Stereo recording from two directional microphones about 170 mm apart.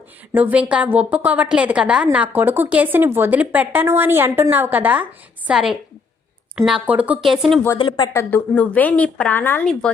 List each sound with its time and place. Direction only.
0.3 s a woman's voice: 10° right (ahead or behind)
7.8 s speech: 30° left (ahead or behind)
8.1 s a woman's voice: 15° left (ahead or behind)